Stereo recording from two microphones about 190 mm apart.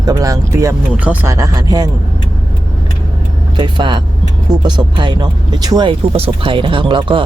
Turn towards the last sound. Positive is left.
turn(degrees=-25)  # may be behind; listen again after turning